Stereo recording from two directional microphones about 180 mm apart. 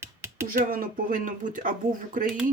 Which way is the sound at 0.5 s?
50° right (ahead or behind).